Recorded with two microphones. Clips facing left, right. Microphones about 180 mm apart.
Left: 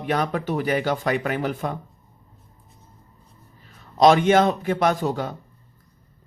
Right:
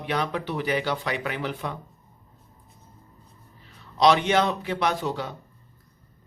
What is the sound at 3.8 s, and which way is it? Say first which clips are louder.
Speech: left 4 dB; 45° left (ahead or behind).